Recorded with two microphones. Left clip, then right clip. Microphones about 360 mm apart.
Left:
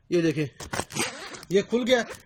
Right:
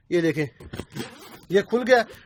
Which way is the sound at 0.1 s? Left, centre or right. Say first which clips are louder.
Right 2 dB; centre.